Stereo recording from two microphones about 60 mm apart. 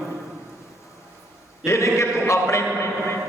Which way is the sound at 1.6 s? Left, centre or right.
Left.